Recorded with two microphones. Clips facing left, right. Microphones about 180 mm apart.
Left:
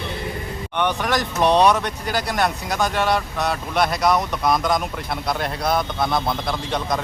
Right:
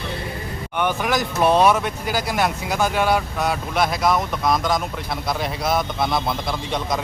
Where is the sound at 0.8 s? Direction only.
5° right (ahead or behind).